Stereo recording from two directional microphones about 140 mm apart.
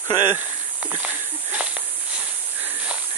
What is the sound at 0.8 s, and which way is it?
Speech, 10° right (ahead or behind).